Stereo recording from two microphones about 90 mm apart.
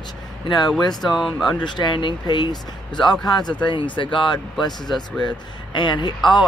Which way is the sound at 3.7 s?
65° left (ahead or behind).